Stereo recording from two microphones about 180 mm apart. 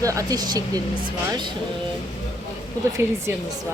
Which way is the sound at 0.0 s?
20° right (ahead or behind).